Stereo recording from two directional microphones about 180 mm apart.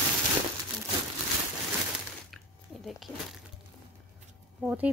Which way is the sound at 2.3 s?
Centre (ahead or behind).